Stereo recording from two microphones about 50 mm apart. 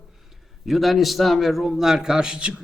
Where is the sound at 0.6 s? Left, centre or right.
Centre.